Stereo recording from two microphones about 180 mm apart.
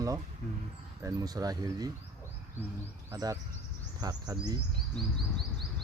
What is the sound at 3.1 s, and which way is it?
Speech, 20° right (ahead or behind).